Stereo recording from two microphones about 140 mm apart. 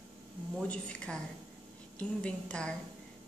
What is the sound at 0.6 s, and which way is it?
A woman's voice, 5° left (ahead or behind).